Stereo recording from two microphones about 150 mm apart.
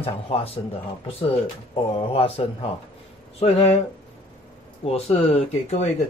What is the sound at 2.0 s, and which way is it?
Speech, 40° left (ahead or behind).